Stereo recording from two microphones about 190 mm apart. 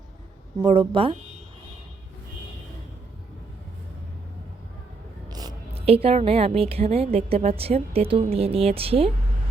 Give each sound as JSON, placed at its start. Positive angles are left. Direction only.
{"t": 0.6, "sound": "a woman's voice", "side_deg": -30}
{"t": 5.3, "sound": "a sound", "side_deg": -20}
{"t": 5.7, "sound": "a woman's voice", "side_deg": -30}